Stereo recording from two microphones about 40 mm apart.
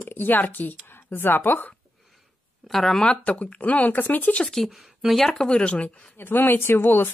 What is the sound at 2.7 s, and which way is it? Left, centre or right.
Speech, centre.